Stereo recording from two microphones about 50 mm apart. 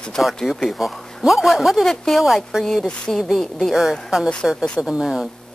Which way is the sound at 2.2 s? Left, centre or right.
Centre.